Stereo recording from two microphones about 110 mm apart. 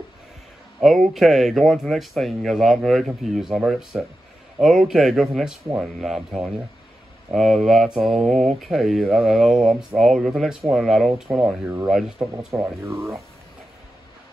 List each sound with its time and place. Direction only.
1.1 s speech: centre (ahead or behind)
11.2 s speech: 15° right (ahead or behind)
12.2 s speech: centre (ahead or behind)
12.5 s speech: 25° right (ahead or behind)